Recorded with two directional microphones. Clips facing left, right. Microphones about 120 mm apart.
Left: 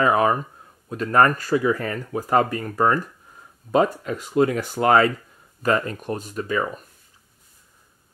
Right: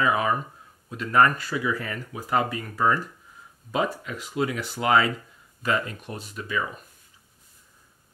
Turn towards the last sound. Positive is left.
turn(degrees=45)  # may be behind; listen again after turning